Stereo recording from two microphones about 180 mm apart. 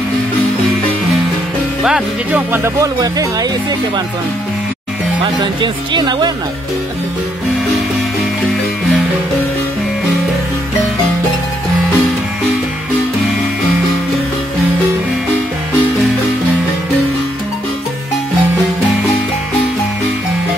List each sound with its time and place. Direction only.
1.8 s speech: 5° right (ahead or behind); by 3.4 s 20° right (ahead or behind)
5.2 s speech: 25° right (ahead or behind)